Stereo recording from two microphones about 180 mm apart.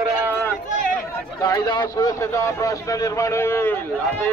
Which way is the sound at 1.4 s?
20° left (ahead or behind).